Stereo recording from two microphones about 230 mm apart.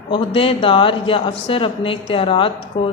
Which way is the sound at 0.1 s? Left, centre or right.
Left.